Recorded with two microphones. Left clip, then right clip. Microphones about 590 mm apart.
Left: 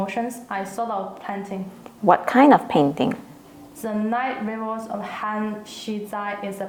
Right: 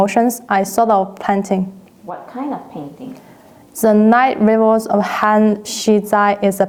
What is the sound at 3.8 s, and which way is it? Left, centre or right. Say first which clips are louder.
A woman's voice: right 13 dB; right.